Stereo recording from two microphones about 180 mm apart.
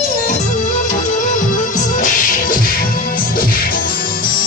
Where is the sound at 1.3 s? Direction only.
45° left (ahead or behind).